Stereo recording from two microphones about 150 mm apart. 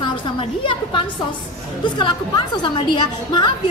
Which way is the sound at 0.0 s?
30° left (ahead or behind).